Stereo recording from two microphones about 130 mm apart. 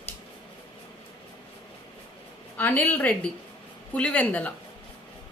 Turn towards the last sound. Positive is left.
turn(degrees=10)  # may be behind; listen again after turning